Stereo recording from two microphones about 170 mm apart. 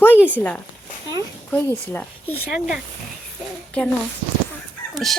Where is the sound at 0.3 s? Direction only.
10° left (ahead or behind).